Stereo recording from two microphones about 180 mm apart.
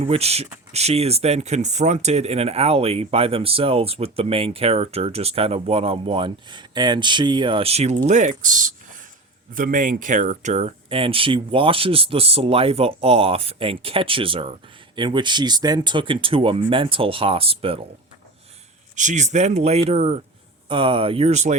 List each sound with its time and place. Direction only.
0.0 s speech: 35° right (ahead or behind)
18.9 s speech: 40° right (ahead or behind)